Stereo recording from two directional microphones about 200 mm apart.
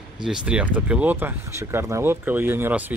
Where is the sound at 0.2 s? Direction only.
5° right (ahead or behind).